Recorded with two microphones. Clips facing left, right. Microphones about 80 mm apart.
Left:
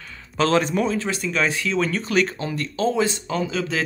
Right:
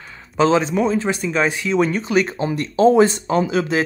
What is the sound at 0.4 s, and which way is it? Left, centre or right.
Speech, centre.